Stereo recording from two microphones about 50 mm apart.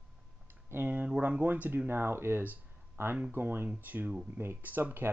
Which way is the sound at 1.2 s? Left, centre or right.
Right.